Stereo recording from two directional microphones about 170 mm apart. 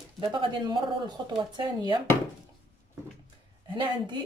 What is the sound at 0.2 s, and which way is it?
Speech, 30° right (ahead or behind).